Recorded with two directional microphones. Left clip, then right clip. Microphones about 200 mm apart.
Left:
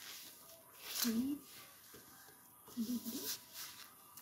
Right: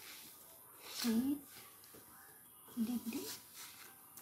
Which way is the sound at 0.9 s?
50° left (ahead or behind).